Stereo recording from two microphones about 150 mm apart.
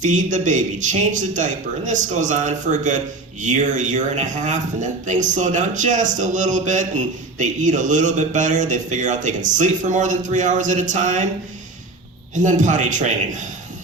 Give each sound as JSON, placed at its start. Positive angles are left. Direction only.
{"t": 0.0, "sound": "speech", "side_deg": -55}
{"t": 12.3, "sound": "speech", "side_deg": -55}